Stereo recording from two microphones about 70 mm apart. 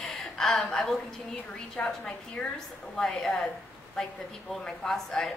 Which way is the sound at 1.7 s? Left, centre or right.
Centre.